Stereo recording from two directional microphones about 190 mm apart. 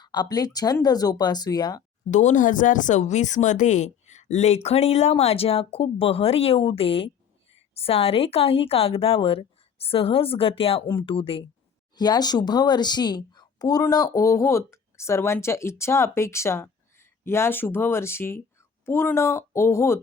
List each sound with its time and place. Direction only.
0.0 s a woman's voice: 20° left (ahead or behind)
2.0 s a woman's voice: 40° left (ahead or behind); by 20.0 s 15° left (ahead or behind)